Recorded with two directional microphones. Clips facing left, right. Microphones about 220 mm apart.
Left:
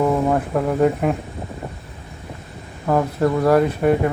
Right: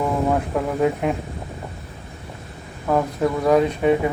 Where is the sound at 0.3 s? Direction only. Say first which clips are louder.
Left 2 dB; centre (ahead or behind).